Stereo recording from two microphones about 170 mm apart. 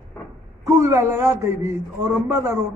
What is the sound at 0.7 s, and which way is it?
A man's voice, 15° right (ahead or behind).